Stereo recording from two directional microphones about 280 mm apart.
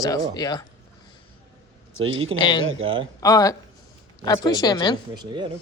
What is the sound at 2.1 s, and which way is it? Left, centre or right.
Speech, centre.